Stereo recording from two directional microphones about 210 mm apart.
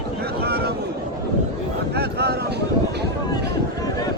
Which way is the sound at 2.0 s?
50° right (ahead or behind).